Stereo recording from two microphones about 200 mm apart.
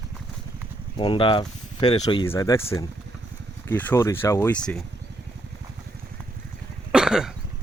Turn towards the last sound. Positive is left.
turn(degrees=-5)  # may be behind; listen again after turning